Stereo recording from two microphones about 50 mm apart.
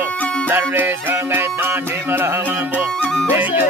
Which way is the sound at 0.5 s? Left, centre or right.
Right.